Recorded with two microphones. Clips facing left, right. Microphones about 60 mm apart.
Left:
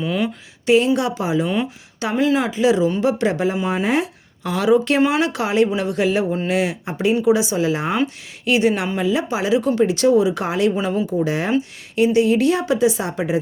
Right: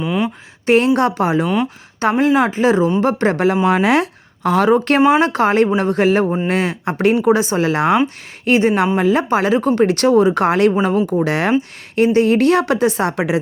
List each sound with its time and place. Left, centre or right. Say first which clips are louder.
0.0 s speech: right 2 dB; centre
0.6 s speech: right 3 dB; right
3.7 s speech: right 5 dB; right
8.4 s a woman's voice: right 4 dB; right
11.9 s a woman's voice: right 3 dB; right